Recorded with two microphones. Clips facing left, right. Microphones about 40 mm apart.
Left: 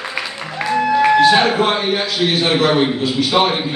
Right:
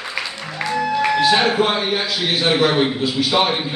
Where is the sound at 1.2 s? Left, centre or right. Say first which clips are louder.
Left 3 dB; centre.